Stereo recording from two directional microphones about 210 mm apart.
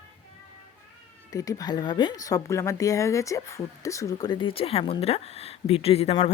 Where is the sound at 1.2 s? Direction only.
15° left (ahead or behind).